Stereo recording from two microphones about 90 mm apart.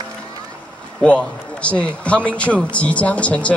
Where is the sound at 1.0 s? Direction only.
15° left (ahead or behind).